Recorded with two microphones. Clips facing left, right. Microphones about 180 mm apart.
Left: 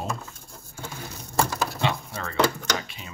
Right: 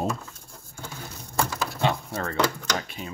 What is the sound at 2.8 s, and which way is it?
Speech, 50° right (ahead or behind).